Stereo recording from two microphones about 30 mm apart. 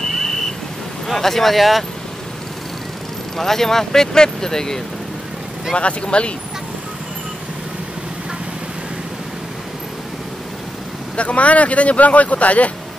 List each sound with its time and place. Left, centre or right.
1.0 s speech: centre
3.3 s speech: centre
5.8 s speech: left
11.1 s speech: left